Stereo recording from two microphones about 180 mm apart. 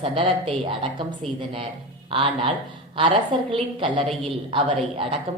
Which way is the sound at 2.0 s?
30° right (ahead or behind).